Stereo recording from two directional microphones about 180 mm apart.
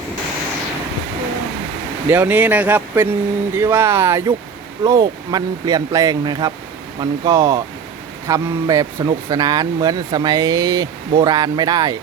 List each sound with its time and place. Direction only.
2.0 s speech: 10° right (ahead or behind)